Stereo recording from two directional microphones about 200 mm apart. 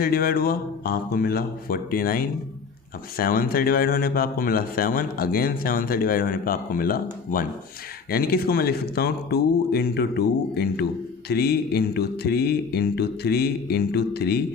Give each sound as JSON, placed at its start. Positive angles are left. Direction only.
{"t": 0.0, "sound": "speech", "side_deg": 45}